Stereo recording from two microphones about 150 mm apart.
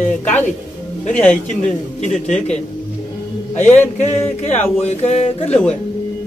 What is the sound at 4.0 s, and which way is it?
A man's voice, 45° left (ahead or behind).